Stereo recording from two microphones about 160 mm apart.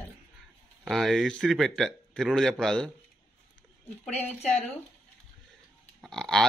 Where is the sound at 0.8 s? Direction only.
Centre (ahead or behind).